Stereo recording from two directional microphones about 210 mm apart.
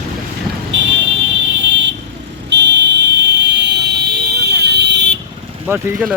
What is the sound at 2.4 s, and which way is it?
Fire alarm, 55° right (ahead or behind).